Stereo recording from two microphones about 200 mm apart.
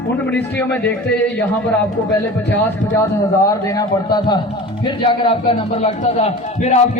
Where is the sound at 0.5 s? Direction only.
10° left (ahead or behind).